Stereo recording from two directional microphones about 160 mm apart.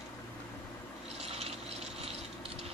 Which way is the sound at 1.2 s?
45° right (ahead or behind).